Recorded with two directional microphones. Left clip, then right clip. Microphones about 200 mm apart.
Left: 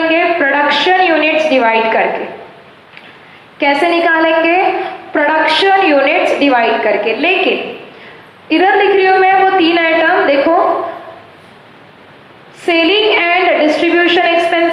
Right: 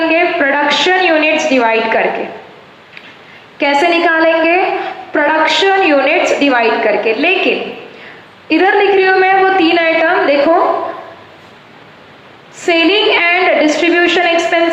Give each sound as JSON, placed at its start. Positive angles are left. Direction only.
{"t": 0.1, "sound": "a sound", "side_deg": -50}
{"t": 3.6, "sound": "a woman's voice", "side_deg": -50}
{"t": 12.6, "sound": "a woman's voice", "side_deg": -50}